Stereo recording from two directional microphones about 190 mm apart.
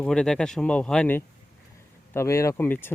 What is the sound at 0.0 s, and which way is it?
Speech, 5° left (ahead or behind).